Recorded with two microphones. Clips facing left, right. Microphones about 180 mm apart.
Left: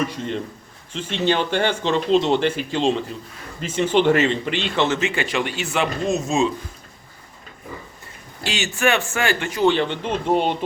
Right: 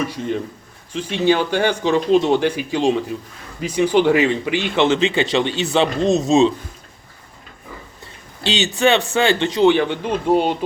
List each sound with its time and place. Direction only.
0.0 s speech: 5° right (ahead or behind)
4.7 s speech: 20° right (ahead or behind)
6.2 s speech: 20° right (ahead or behind)
8.8 s speech: 20° right (ahead or behind)
9.7 s speech: 10° right (ahead or behind)